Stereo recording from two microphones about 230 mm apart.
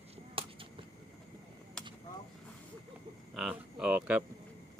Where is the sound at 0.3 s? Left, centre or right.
Right.